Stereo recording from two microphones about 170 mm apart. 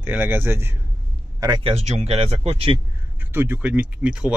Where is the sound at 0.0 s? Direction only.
10° right (ahead or behind).